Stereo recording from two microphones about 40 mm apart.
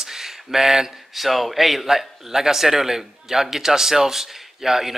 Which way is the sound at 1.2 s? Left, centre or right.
Centre.